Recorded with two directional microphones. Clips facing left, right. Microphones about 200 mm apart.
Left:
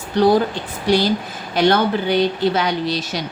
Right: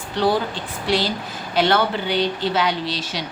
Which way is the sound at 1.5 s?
45° left (ahead or behind).